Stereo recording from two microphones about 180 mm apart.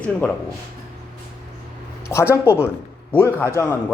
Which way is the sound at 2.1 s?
15° left (ahead or behind).